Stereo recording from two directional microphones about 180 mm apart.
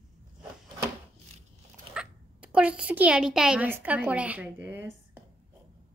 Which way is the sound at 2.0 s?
5° right (ahead or behind).